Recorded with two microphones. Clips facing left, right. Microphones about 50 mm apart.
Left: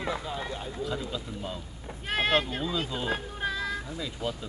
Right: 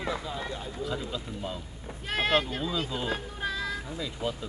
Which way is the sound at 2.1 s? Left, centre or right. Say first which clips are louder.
Even; left.